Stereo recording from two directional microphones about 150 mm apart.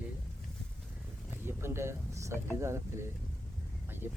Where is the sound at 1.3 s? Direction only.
15° right (ahead or behind).